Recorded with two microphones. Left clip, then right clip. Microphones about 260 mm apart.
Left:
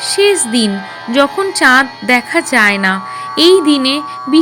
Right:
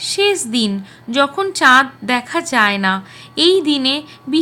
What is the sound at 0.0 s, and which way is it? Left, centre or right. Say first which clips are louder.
A woman's voice: left 5 dB; centre.